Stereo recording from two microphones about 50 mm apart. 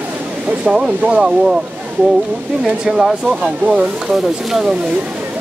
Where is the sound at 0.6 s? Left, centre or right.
Centre.